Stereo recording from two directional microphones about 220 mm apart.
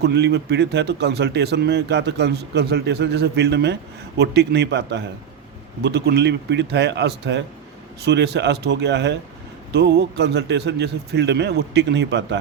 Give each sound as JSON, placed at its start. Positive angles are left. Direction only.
{"t": 0.0, "sound": "speech", "side_deg": -50}